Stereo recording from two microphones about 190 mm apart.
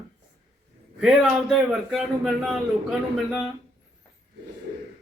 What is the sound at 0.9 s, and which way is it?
A man's voice, centre (ahead or behind).